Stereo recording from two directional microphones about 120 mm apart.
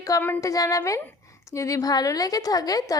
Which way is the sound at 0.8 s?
20° left (ahead or behind).